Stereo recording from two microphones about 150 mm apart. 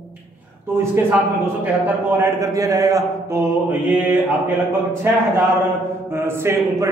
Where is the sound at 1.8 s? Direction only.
15° right (ahead or behind).